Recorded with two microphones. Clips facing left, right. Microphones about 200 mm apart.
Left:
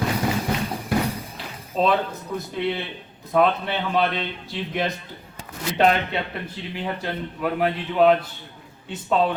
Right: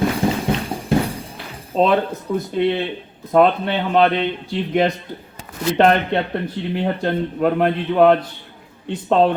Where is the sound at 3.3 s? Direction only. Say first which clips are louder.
Right 5 dB; 55° right (ahead or behind).